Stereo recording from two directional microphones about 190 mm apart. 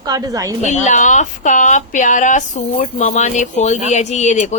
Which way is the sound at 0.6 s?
40° left (ahead or behind).